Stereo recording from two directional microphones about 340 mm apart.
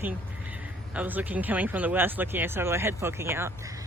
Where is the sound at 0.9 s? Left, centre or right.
Centre.